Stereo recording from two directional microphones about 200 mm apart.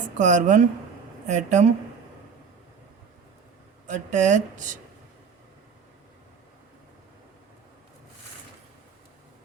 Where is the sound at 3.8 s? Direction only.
40° right (ahead or behind).